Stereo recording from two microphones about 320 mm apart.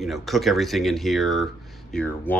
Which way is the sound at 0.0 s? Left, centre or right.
Centre.